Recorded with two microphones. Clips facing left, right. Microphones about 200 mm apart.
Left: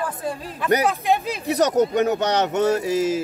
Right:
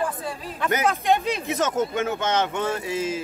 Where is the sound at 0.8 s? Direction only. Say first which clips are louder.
Even; centre (ahead or behind).